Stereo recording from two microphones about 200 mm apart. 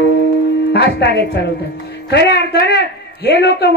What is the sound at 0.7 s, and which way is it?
Speech, 55° left (ahead or behind).